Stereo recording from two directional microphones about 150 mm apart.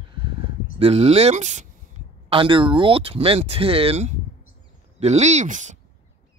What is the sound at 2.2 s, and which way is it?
Speech, 35° right (ahead or behind).